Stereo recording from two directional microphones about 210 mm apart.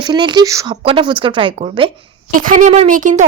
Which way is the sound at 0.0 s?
20° right (ahead or behind).